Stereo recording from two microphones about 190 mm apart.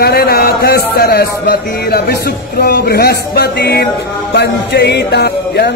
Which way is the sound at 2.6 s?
55° left (ahead or behind).